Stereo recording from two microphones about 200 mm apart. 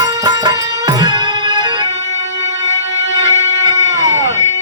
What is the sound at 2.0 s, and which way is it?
Music, 65° left (ahead or behind).